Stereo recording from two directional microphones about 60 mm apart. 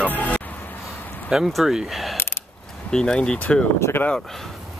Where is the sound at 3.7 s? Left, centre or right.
Left.